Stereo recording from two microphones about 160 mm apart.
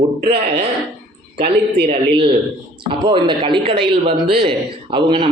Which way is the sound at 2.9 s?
30° right (ahead or behind).